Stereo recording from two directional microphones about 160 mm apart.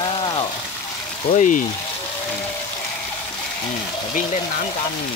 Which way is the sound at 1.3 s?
50° left (ahead or behind).